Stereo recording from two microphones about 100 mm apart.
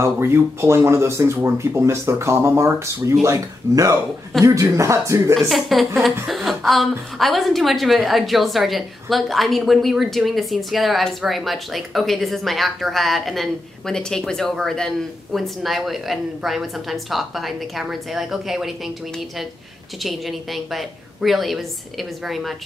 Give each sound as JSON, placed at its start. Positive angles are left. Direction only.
{"t": 0.0, "sound": "speech", "side_deg": -25}
{"t": 5.3, "sound": "a woman's voice", "side_deg": 0}
{"t": 20.0, "sound": "a woman's voice", "side_deg": 0}